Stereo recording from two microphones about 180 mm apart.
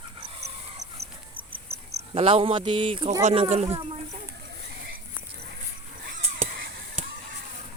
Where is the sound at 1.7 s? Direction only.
35° right (ahead or behind).